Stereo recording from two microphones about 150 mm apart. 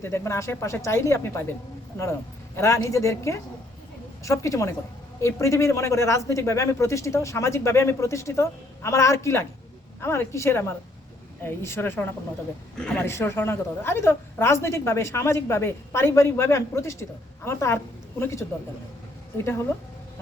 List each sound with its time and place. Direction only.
0.0 s a woman's voice: 20° left (ahead or behind)
2.6 s a woman's voice: 20° left (ahead or behind)
12.7 s speech: 5° left (ahead or behind)
13.1 s a woman's voice: 15° left (ahead or behind)